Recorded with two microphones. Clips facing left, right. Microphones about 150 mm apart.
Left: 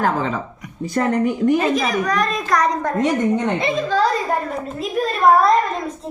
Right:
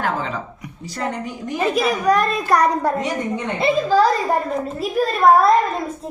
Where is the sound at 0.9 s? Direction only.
55° left (ahead or behind).